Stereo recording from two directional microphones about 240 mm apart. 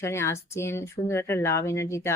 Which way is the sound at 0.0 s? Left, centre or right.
Centre.